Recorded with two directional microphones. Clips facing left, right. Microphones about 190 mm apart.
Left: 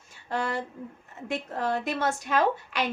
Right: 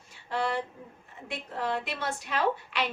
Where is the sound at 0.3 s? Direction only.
45° left (ahead or behind).